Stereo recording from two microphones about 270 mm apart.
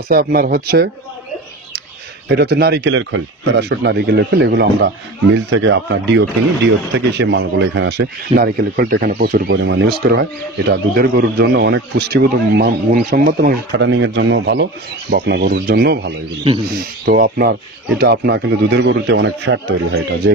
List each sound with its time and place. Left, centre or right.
0.1 s speech: right
2.2 s speech: right